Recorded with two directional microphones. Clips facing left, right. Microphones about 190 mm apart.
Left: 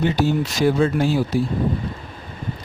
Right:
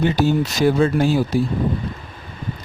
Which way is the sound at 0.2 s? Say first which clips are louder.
Right 2 dB; 45° right (ahead or behind).